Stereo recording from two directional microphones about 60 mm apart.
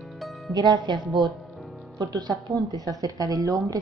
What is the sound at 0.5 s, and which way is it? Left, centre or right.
Speech, right.